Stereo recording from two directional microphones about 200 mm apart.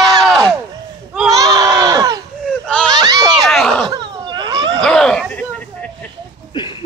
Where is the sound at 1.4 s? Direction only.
20° right (ahead or behind).